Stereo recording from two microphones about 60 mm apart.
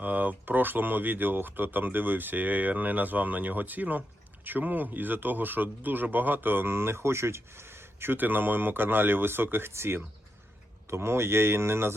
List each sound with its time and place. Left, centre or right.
0.0 s a man's voice: right